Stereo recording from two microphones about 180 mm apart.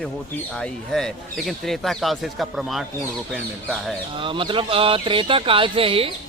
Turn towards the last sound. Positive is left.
turn(degrees=-30)  # may be behind; listen again after turning